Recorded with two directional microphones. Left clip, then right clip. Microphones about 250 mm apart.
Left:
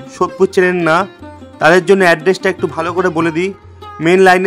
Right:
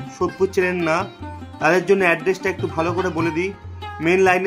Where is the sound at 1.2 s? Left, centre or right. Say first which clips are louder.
Left 2 dB; centre.